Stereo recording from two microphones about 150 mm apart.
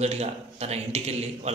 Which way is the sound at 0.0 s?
45° right (ahead or behind).